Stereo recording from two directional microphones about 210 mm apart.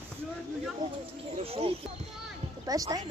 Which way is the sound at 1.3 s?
25° right (ahead or behind).